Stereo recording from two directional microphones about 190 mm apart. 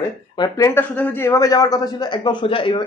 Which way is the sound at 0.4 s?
15° left (ahead or behind).